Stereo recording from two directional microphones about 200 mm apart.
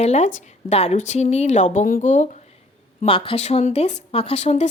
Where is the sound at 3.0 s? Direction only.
25° left (ahead or behind).